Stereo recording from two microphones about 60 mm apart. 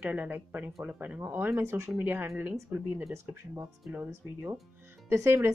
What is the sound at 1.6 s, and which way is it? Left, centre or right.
Speech, right.